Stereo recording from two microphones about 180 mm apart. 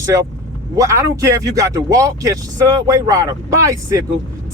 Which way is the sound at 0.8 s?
15° right (ahead or behind).